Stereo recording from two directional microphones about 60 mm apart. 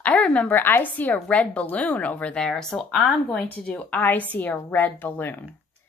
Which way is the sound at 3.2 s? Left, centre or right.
Left.